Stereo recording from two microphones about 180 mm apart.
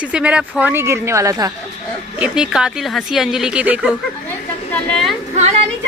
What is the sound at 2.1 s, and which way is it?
Speech, 5° right (ahead or behind).